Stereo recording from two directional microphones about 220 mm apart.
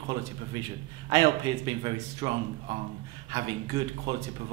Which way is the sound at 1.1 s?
15° right (ahead or behind).